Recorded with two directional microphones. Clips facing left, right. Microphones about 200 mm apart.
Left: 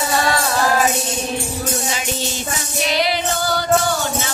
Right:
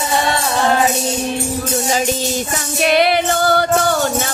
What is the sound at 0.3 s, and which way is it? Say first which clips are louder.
Music: right 1 dB; 25° right (ahead or behind).